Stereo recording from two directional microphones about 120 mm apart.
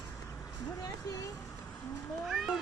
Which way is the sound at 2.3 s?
5° right (ahead or behind).